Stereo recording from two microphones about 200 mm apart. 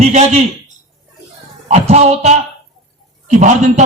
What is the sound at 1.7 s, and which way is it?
Speech, 30° right (ahead or behind).